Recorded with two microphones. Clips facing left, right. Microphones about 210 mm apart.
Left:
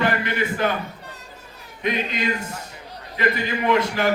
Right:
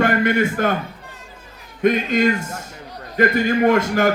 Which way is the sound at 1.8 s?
45° right (ahead or behind).